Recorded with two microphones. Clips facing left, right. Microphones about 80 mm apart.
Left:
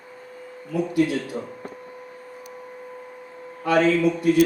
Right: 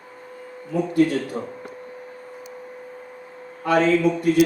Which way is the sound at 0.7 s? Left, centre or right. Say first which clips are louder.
Right 2 dB; right.